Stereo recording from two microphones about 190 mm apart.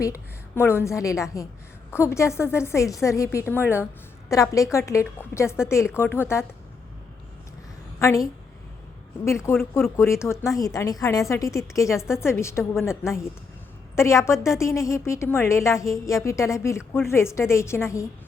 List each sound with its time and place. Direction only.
0.0 s a woman's voice: 15° left (ahead or behind)
7.9 s a woman's voice: 15° left (ahead or behind)